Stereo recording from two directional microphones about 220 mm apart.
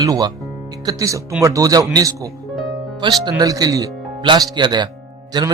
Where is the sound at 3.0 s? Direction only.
20° right (ahead or behind).